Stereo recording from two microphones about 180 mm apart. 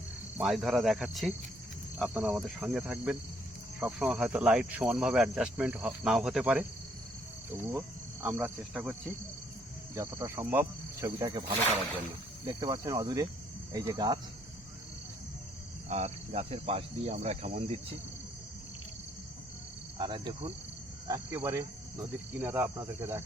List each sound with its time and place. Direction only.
0.3 s speech: centre (ahead or behind)
7.7 s cricket: 15° right (ahead or behind)
9.9 s speech: 15° right (ahead or behind)
12.5 s cricket: 25° right (ahead or behind)
15.9 s cricket: 35° right (ahead or behind)
20.0 s cricket: 25° right (ahead or behind)
21.1 s speech: 15° right (ahead or behind)